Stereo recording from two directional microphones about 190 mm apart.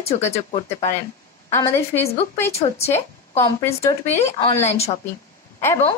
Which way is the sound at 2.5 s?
35° left (ahead or behind).